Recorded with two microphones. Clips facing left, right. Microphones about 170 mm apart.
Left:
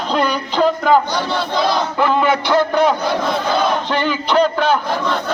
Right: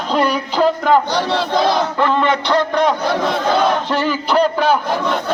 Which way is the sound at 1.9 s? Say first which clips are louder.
Even; 5° left (ahead or behind).